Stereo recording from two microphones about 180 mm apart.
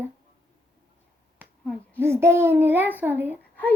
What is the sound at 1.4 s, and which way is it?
Finger snapping, 10° right (ahead or behind).